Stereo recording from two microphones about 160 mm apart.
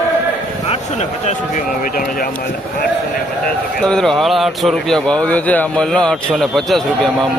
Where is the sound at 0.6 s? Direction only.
40° left (ahead or behind); by 2.2 s 60° left (ahead or behind).